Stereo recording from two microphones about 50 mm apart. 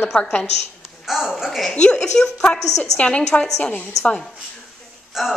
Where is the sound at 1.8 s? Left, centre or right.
Centre.